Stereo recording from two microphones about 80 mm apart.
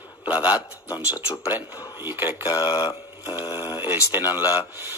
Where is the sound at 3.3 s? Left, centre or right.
Left.